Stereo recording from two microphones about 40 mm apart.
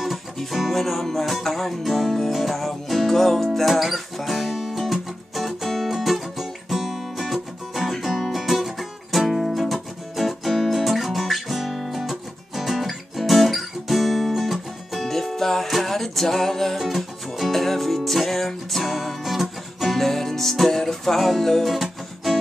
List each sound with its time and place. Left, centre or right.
0.5 s music: centre
9.5 s music: centre